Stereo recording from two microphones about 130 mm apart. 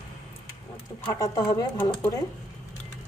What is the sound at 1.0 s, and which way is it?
Speech, 25° left (ahead or behind).